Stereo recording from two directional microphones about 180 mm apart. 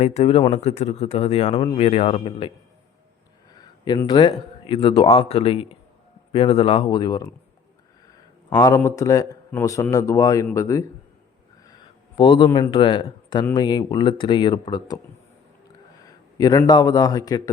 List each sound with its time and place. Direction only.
0.0 s speech: 35° left (ahead or behind)
3.5 s a man's voice: 20° left (ahead or behind)
12.1 s a man's voice: 25° left (ahead or behind)
16.4 s speech: 20° left (ahead or behind)